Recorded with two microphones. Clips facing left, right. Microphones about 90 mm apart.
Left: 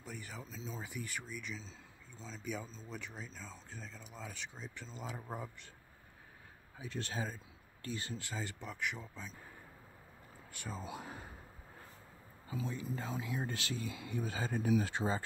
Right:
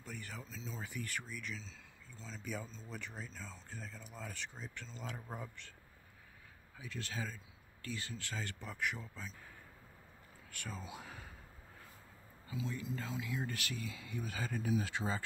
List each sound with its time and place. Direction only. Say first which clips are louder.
0.0 s speech: left 1 dB; 5° left (ahead or behind)
6.8 s speech: left 3 dB; 25° left (ahead or behind)
8.6 s speech: even; centre (ahead or behind)
10.5 s speech: left 2 dB; 20° left (ahead or behind)
10.8 s speech: left 4 dB; 40° left (ahead or behind)
12.6 s speech: left 1 dB; 20° left (ahead or behind)